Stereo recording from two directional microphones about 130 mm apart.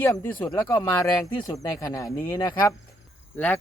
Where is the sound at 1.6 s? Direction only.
25° left (ahead or behind).